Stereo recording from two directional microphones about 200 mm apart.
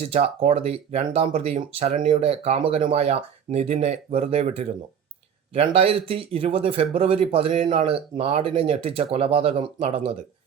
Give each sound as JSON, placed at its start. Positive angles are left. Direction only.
{"t": 0.0, "sound": "speech", "side_deg": -30}